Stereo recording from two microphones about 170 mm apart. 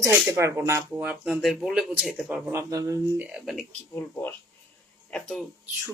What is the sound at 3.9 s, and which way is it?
Speech, 15° left (ahead or behind).